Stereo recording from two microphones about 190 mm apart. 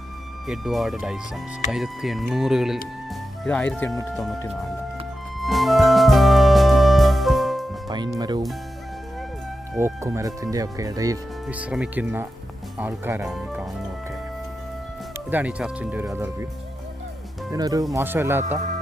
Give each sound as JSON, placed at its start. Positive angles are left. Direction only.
{"t": 0.4, "sound": "speech", "side_deg": 0}
{"t": 4.1, "sound": "speech", "side_deg": 0}
{"t": 5.4, "sound": "music", "side_deg": 0}
{"t": 7.9, "sound": "speech", "side_deg": -20}
{"t": 9.7, "sound": "speech", "side_deg": -15}
{"t": 11.4, "sound": "speech", "side_deg": -5}
{"t": 15.3, "sound": "speech", "side_deg": -10}
{"t": 17.5, "sound": "speech", "side_deg": -20}
{"t": 18.4, "sound": "speech", "side_deg": -35}